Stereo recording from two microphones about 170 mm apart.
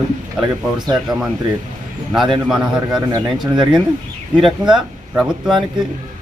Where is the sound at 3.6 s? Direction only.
Centre (ahead or behind).